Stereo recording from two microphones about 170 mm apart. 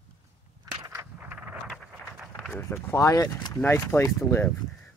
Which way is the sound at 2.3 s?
15° left (ahead or behind).